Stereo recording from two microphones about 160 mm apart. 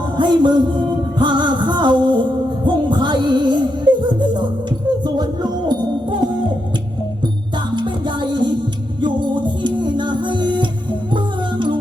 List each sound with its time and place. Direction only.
0.2 s music: 30° right (ahead or behind)
7.8 s music: 30° right (ahead or behind)